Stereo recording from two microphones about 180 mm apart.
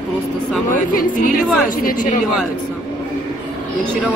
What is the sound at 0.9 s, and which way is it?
Speech, 50° left (ahead or behind).